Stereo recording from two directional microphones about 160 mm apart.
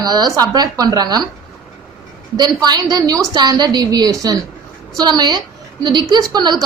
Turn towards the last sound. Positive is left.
turn(degrees=-25)  # may be behind; listen again after turning